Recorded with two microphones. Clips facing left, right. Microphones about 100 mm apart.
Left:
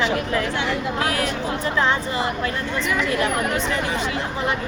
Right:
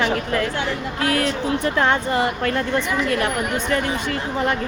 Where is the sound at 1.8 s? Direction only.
55° right (ahead or behind).